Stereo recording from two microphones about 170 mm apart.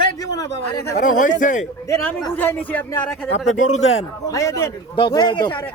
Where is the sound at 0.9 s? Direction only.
50° left (ahead or behind).